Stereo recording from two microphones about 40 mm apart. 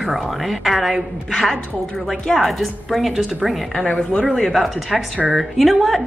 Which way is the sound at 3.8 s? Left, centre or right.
Left.